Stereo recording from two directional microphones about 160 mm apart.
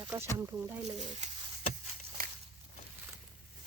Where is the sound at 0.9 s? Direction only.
45° right (ahead or behind).